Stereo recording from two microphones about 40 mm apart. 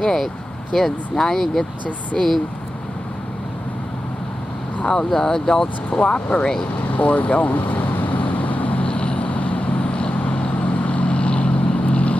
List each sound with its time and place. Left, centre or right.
0.0 s speech: centre
4.8 s speech: centre
5.9 s speech: left
6.9 s speech: left
7.5 s vehicle: left
8.8 s vehicle: left